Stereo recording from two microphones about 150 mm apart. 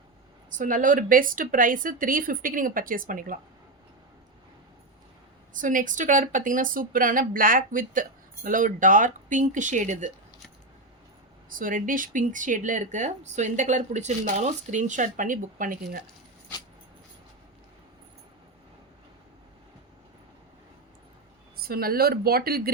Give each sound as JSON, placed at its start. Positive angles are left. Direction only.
{"t": 0.5, "sound": "speech", "side_deg": -60}
{"t": 5.5, "sound": "speech", "side_deg": -60}
{"t": 11.4, "sound": "speech", "side_deg": -65}
{"t": 21.6, "sound": "speech", "side_deg": -90}